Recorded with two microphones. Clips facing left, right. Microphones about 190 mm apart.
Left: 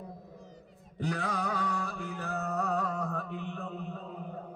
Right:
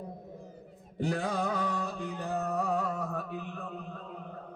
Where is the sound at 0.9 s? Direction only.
30° right (ahead or behind); by 3.8 s centre (ahead or behind).